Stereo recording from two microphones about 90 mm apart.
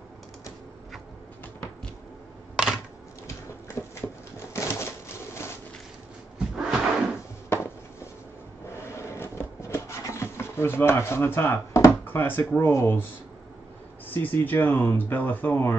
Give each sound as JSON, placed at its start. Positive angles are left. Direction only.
{"t": 3.3, "sound": "a sound", "side_deg": 30}
{"t": 6.5, "sound": "cupboard open or close", "side_deg": -5}
{"t": 7.4, "sound": "a sound", "side_deg": 30}
{"t": 8.7, "sound": "rub", "side_deg": 30}
{"t": 12.5, "sound": "speech", "side_deg": 30}
{"t": 14.0, "sound": "speech", "side_deg": 20}